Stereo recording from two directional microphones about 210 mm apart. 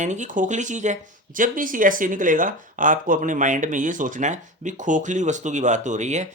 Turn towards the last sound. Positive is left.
turn(degrees=-35)  # may be behind; listen again after turning